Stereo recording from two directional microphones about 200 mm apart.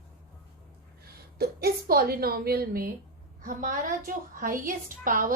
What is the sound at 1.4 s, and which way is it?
A woman's voice, 50° right (ahead or behind).